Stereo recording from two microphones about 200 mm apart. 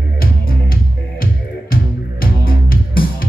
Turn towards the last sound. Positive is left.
turn(degrees=45)  # may be behind; listen again after turning